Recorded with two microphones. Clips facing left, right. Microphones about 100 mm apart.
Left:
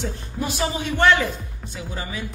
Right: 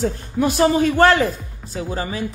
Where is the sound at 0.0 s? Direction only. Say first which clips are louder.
Right 8 dB; 50° right (ahead or behind).